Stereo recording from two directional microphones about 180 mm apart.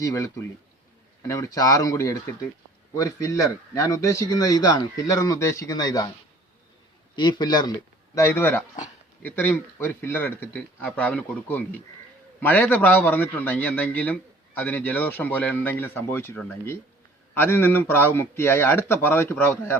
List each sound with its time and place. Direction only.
0.0 s a man's voice: 20° left (ahead or behind)
1.3 s speech: 20° left (ahead or behind)
7.2 s a man's voice: 25° left (ahead or behind)